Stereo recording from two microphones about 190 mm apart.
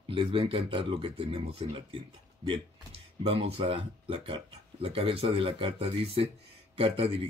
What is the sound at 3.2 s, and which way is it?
Speech, 30° right (ahead or behind).